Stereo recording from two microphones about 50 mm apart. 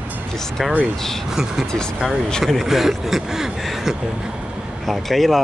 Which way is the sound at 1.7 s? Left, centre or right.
Centre.